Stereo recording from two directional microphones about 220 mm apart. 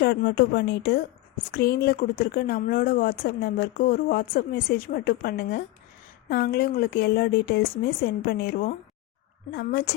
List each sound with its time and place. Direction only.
0.0 s speech: 45° left (ahead or behind)